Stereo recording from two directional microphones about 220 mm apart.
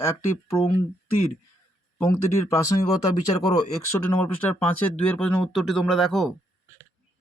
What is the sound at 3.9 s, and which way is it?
Speech, 5° left (ahead or behind).